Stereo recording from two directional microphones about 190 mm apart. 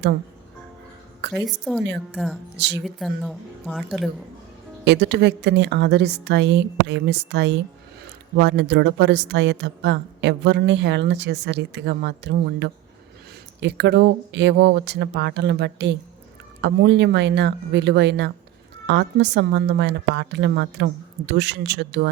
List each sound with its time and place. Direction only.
1.4 s speech: centre (ahead or behind)
2.6 s a woman's voice: 65° right (ahead or behind)
2.8 s speech: centre (ahead or behind)
4.9 s a woman's voice: 65° right (ahead or behind)